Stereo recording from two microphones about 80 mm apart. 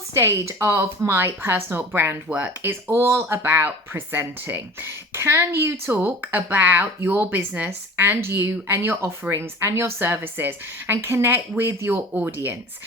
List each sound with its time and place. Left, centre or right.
0.1 s speech: right